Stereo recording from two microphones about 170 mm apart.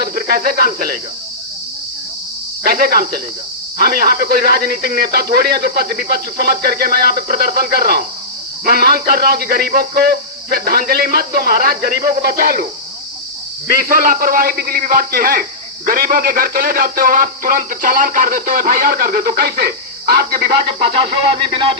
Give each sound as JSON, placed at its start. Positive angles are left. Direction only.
{"t": 0.0, "sound": "speech", "side_deg": -60}
{"t": 2.6, "sound": "speech", "side_deg": -60}
{"t": 13.7, "sound": "speech", "side_deg": -55}